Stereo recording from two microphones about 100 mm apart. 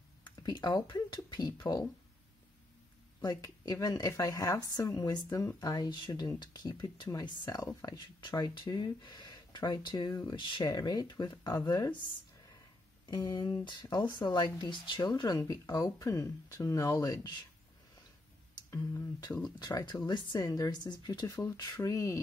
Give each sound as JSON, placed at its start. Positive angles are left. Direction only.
{"t": 0.4, "sound": "a woman's voice", "side_deg": 40}
{"t": 3.2, "sound": "a woman's voice", "side_deg": 40}
{"t": 13.1, "sound": "a woman's voice", "side_deg": 40}
{"t": 15.4, "sound": "a woman's voice", "side_deg": 35}
{"t": 18.7, "sound": "a woman's voice", "side_deg": 35}